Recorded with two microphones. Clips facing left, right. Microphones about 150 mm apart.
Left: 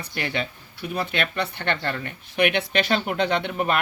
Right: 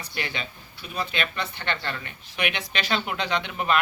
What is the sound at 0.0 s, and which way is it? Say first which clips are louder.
Speech: left 5 dB; 60° left (ahead or behind).